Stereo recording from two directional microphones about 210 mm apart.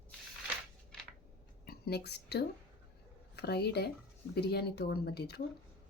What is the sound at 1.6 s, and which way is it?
A woman's voice, 50° left (ahead or behind).